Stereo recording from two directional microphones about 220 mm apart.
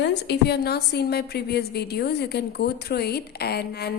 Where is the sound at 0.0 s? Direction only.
50° left (ahead or behind).